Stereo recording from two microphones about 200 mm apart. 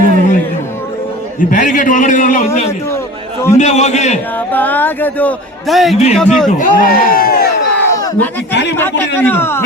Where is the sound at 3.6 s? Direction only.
35° left (ahead or behind).